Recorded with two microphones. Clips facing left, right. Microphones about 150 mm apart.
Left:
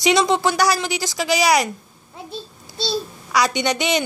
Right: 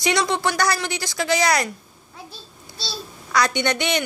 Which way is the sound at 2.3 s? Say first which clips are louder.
Left 9 dB; 25° left (ahead or behind).